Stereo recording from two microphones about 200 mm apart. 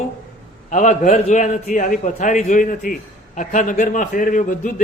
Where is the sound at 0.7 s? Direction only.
40° left (ahead or behind).